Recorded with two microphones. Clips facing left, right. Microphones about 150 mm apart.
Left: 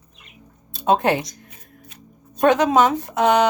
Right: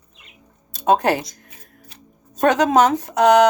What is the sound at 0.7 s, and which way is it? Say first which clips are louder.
Speech: right 1 dB; 45° right (ahead or behind).